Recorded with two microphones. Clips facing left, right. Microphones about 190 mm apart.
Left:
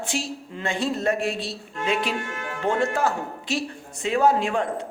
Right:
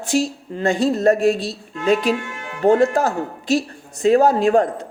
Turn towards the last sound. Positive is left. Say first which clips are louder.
# right 6 dB
turn(degrees=-40)  # may be behind; listen again after turning